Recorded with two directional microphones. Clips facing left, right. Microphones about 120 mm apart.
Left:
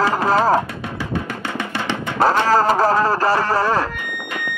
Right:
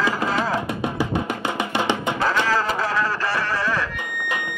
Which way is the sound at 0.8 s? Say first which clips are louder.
Right 2 dB; 15° right (ahead or behind).